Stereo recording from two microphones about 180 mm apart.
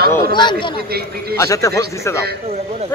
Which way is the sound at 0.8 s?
60° right (ahead or behind).